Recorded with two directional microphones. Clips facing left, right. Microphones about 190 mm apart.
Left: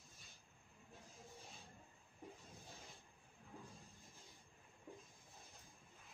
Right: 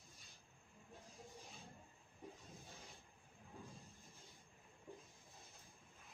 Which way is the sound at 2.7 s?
Centre (ahead or behind).